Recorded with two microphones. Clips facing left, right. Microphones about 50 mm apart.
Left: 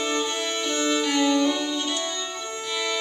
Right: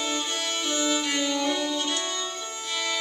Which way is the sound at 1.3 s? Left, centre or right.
Centre.